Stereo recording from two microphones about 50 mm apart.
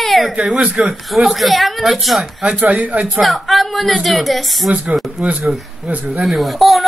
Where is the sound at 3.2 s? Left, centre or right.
Centre.